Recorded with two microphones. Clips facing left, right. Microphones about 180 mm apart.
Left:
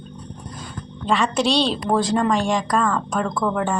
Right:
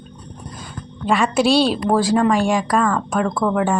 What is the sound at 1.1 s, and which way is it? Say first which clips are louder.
A woman's voice: right 3 dB; 10° right (ahead or behind).